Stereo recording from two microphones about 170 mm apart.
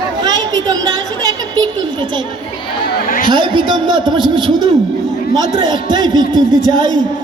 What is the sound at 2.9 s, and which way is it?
Chatter, 60° left (ahead or behind).